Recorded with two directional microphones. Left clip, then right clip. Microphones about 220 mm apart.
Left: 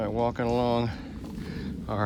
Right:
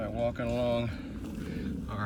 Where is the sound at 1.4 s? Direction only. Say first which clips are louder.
Left 6 dB; 10° left (ahead or behind).